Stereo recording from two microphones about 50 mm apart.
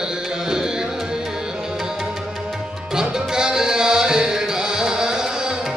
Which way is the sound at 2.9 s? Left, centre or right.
Centre.